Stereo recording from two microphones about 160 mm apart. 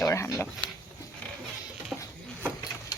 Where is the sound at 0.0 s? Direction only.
20° left (ahead or behind).